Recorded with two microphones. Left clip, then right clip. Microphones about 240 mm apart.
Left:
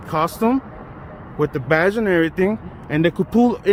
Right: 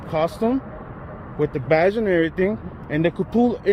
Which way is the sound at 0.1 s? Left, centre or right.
Left.